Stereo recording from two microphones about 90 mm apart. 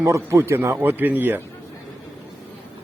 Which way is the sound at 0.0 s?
35° right (ahead or behind).